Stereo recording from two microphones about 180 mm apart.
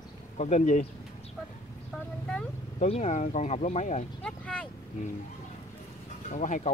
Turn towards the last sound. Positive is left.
turn(degrees=45)  # may be behind; listen again after turning